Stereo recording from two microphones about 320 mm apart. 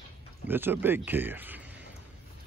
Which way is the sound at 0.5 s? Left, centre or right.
Centre.